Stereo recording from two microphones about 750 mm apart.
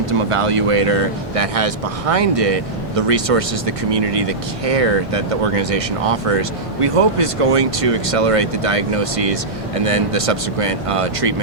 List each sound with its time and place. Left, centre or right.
0.0 s speech: right